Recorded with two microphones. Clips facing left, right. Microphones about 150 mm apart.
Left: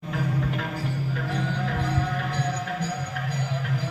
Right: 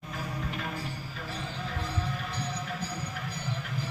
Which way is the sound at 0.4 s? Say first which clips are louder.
Left 6 dB; 70° left (ahead or behind).